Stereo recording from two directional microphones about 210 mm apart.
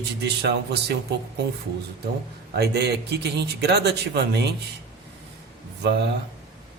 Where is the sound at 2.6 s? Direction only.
50° right (ahead or behind).